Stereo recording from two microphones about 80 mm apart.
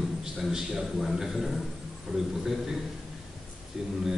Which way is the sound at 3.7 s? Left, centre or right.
Centre.